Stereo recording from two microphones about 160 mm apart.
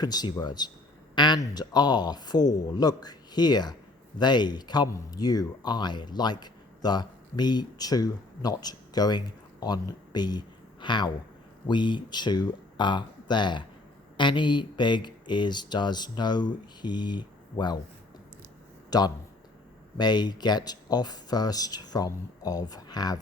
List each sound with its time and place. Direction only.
0.0 s speech: 25° left (ahead or behind)
18.9 s speech: 25° left (ahead or behind)